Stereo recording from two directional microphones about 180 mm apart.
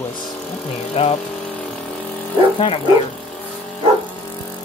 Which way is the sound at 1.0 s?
30° left (ahead or behind).